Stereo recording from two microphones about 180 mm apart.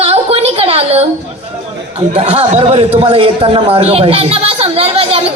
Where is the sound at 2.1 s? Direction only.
35° right (ahead or behind).